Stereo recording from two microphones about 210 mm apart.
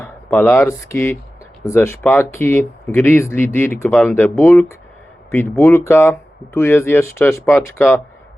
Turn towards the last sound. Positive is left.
turn(degrees=10)  # may be behind; listen again after turning